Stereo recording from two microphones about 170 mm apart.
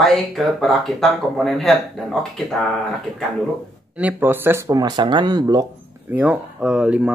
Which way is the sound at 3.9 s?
10° right (ahead or behind).